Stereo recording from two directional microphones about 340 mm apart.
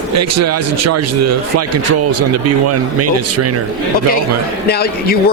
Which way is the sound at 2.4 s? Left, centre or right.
Right.